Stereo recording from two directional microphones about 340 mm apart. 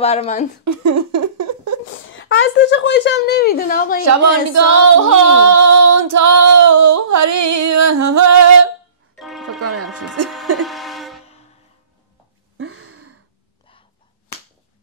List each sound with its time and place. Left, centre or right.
0.0 s a woman's voice: centre
0.7 s a sound: right
2.1 s a woman's voice: left
4.0 s female singing: right
9.1 s music: centre
9.6 s music: right
10.2 s a sound: right
10.6 s vehicle: centre
12.5 s gasp: right